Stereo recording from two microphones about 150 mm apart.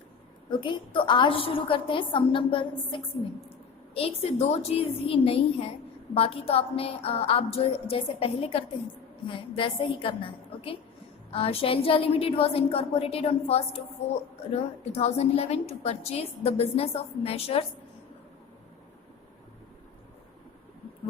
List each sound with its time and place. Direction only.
0.6 s a woman's voice: 30° left (ahead or behind)
3.9 s a woman's voice: 40° left (ahead or behind)